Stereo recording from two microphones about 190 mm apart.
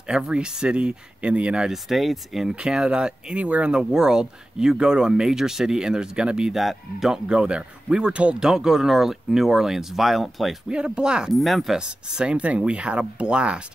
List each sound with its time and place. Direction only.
0.1 s speech: 5° right (ahead or behind)